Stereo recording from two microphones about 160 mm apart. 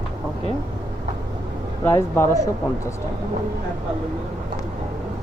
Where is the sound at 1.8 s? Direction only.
15° left (ahead or behind).